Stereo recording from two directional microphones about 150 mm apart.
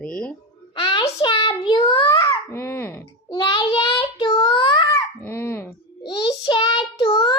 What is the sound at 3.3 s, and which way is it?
Child singing, 35° left (ahead or behind).